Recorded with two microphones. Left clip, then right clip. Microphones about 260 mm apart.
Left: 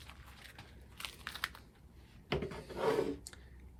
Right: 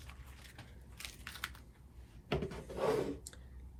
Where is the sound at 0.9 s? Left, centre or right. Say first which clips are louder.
Left 4 dB; left.